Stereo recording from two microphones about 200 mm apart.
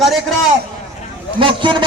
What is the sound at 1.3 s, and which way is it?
Speech, 25° right (ahead or behind).